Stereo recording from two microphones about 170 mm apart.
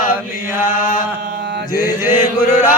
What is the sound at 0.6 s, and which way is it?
Chant, 50° left (ahead or behind).